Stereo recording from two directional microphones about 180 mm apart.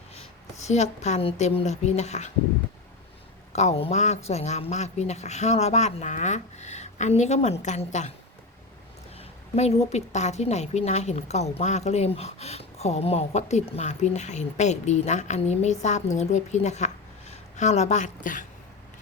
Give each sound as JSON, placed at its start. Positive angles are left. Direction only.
{"t": 0.1, "sound": "a woman's voice", "side_deg": 35}
{"t": 3.5, "sound": "a woman's voice", "side_deg": 40}
{"t": 9.6, "sound": "a woman's voice", "side_deg": 35}